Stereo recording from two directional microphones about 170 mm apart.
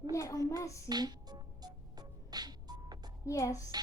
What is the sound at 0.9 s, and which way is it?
Music, 25° right (ahead or behind).